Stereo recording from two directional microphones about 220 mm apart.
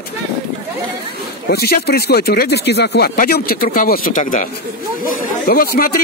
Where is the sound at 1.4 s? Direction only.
45° left (ahead or behind).